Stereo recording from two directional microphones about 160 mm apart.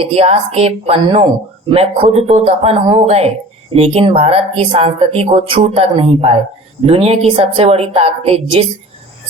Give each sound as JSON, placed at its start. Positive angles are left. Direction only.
{"t": 0.0, "sound": "speech", "side_deg": -40}